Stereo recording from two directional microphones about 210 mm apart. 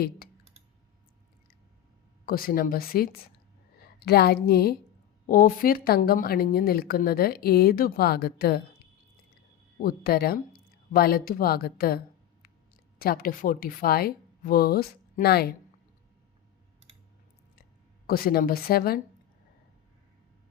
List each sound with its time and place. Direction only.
2.2 s speech: 45° left (ahead or behind)
9.8 s speech: 45° left (ahead or behind)
18.0 s speech: 45° left (ahead or behind)